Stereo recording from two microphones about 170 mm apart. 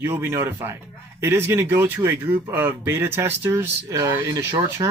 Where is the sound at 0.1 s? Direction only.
15° right (ahead or behind).